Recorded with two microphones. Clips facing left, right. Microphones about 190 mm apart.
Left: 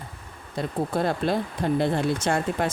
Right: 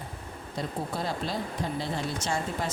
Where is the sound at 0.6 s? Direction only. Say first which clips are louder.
Left 7 dB; 55° left (ahead or behind).